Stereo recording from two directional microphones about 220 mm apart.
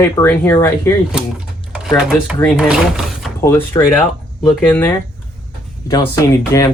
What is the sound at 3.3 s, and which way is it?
Speech, 15° left (ahead or behind).